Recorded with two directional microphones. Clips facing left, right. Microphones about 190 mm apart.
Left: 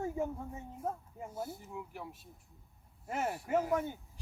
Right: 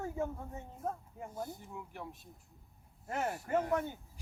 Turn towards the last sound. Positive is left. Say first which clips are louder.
# left 1 dB
turn(degrees=5)  # may be behind; listen again after turning